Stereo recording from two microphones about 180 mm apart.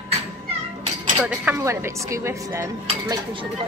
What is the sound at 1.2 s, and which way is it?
Speech, 10° right (ahead or behind).